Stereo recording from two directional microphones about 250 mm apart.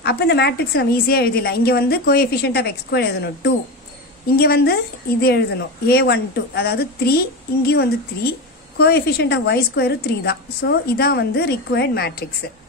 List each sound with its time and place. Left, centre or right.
0.0 s a woman's voice: left